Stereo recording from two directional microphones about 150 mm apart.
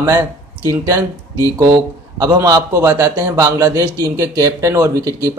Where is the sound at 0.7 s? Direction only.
25° right (ahead or behind).